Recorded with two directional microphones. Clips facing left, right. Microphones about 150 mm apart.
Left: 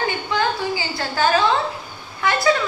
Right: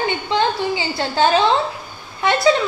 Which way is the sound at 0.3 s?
25° right (ahead or behind).